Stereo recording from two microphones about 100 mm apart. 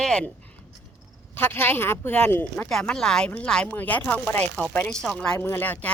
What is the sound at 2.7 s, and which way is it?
Speech, 5° left (ahead or behind).